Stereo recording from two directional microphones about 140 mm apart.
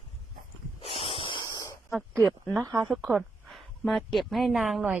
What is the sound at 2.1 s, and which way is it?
Speech, 15° right (ahead or behind).